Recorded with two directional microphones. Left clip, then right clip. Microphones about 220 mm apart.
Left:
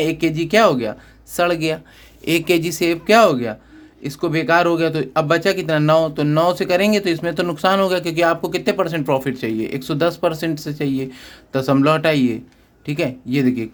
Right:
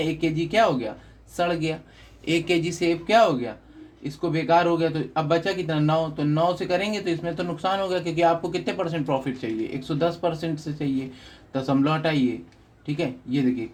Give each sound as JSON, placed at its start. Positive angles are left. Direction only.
{"t": 0.0, "sound": "speech", "side_deg": 40}